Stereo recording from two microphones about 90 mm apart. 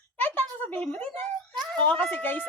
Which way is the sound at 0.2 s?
20° left (ahead or behind).